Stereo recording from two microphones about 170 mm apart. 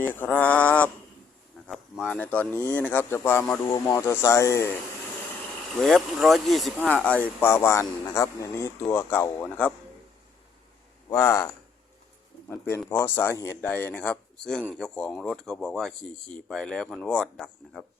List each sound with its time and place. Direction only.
0.0 s speech: 10° left (ahead or behind)
5.8 s speech: centre (ahead or behind)
11.1 s speech: 15° left (ahead or behind)